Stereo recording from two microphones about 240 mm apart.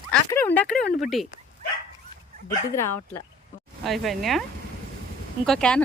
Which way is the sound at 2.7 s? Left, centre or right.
Centre.